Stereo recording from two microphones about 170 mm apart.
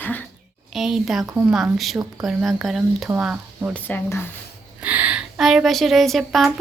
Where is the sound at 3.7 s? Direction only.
10° left (ahead or behind).